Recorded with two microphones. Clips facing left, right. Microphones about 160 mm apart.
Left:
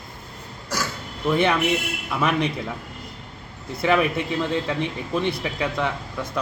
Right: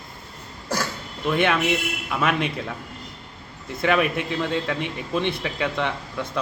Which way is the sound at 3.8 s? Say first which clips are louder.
Left 1 dB; 15° left (ahead or behind).